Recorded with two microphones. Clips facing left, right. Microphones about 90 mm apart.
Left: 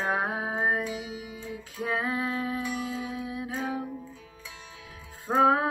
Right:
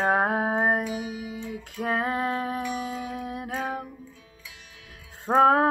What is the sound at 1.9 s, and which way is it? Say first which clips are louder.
Music: right 3 dB; 55° right (ahead or behind).